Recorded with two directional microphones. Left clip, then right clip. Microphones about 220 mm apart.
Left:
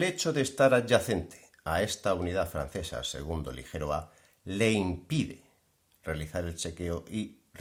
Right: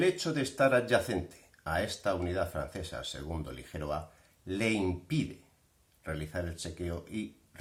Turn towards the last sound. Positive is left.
turn(degrees=40)  # may be behind; listen again after turning